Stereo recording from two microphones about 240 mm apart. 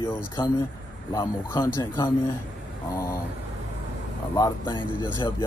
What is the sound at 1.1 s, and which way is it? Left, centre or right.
Speech, centre.